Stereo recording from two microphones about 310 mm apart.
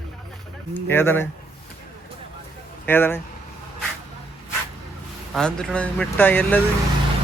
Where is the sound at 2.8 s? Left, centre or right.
Centre.